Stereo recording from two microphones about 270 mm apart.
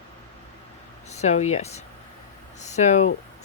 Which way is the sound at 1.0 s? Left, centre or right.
Left.